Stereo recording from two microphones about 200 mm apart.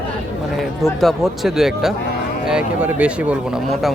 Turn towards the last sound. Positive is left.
turn(degrees=-5)  # may be behind; listen again after turning